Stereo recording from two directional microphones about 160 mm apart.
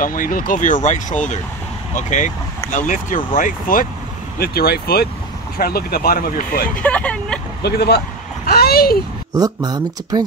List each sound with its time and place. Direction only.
0.0 s speech: 60° left (ahead or behind)
4.4 s speech: 75° left (ahead or behind)
6.8 s speech: 10° left (ahead or behind)
7.6 s speech: 85° left
8.5 s a sound: 70° left (ahead or behind)
9.3 s speech: 25° right (ahead or behind)